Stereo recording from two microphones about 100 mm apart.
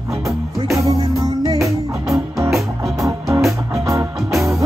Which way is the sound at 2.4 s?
Centre (ahead or behind).